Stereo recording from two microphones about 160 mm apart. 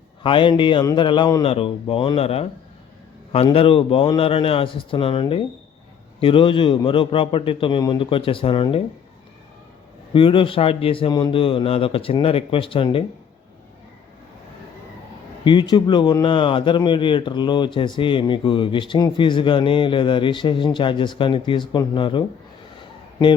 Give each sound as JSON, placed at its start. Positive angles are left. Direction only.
{"t": 0.2, "sound": "speech", "side_deg": 30}
{"t": 10.1, "sound": "speech", "side_deg": 30}
{"t": 15.4, "sound": "a man's voice", "side_deg": 30}